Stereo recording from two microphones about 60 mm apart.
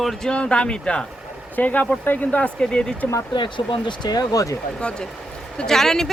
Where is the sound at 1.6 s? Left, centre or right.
Left.